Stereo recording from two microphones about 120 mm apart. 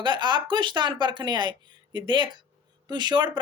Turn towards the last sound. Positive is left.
turn(degrees=-40)  # may be behind; listen again after turning